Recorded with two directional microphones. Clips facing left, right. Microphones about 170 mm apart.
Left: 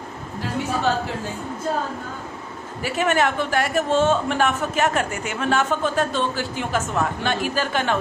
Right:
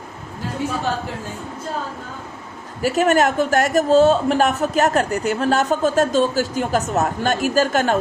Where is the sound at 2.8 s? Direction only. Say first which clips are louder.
Right 5 dB; 40° right (ahead or behind).